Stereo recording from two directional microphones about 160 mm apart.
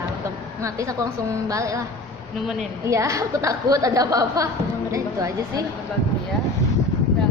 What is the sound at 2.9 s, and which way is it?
A woman's voice, 20° right (ahead or behind).